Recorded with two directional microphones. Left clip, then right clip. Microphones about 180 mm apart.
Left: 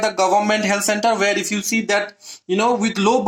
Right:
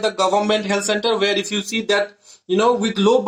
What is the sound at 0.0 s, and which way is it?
A man's voice, 45° left (ahead or behind).